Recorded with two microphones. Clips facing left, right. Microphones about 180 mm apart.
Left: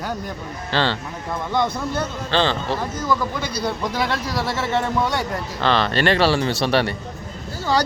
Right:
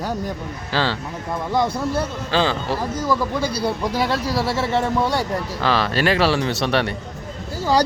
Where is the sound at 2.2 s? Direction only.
5° right (ahead or behind).